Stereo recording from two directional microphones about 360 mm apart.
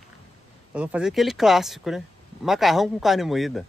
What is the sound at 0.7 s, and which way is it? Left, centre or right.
Speech, centre.